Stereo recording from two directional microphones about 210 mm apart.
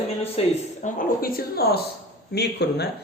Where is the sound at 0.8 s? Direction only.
40° left (ahead or behind).